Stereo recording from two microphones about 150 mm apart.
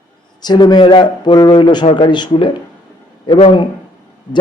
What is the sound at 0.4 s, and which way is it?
A man's voice, 30° left (ahead or behind).